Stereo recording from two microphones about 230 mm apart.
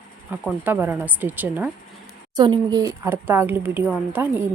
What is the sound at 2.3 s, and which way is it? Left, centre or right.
Speech, centre.